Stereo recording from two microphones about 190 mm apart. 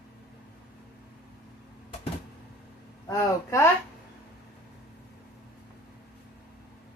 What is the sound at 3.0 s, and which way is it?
Speech, 20° left (ahead or behind).